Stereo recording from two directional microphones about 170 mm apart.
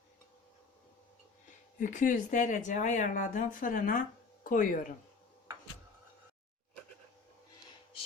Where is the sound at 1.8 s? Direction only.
50° left (ahead or behind).